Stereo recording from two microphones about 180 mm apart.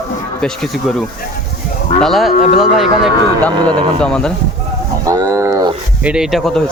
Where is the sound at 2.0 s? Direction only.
Centre (ahead or behind).